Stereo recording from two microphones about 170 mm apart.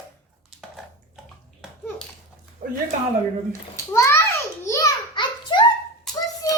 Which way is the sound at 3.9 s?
15° left (ahead or behind).